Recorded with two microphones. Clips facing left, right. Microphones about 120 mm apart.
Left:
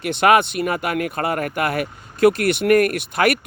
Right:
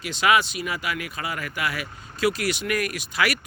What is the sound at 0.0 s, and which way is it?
Speech, 55° left (ahead or behind).